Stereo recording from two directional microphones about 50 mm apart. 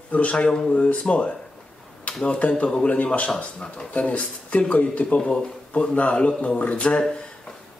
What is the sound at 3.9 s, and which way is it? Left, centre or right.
A man's voice, left.